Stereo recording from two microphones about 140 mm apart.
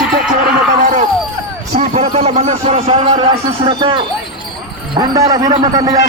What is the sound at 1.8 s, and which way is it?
Speech, 50° right (ahead or behind).